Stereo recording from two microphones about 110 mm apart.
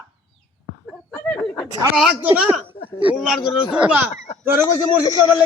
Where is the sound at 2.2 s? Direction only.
15° right (ahead or behind).